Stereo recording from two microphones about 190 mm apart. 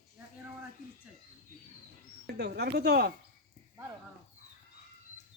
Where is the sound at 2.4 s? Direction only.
60° right (ahead or behind).